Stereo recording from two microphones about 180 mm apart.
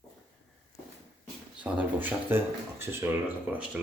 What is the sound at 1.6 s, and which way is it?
Speech, 10° right (ahead or behind).